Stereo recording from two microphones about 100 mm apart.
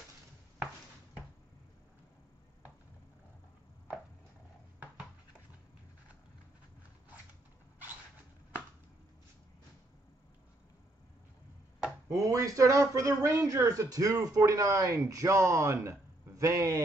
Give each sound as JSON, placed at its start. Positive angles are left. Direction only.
{"t": 12.1, "sound": "speech", "side_deg": -35}